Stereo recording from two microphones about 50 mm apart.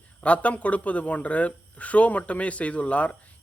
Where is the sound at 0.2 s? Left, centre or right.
Left.